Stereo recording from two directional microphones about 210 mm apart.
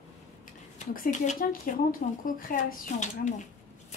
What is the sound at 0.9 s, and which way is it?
Speech, 40° left (ahead or behind).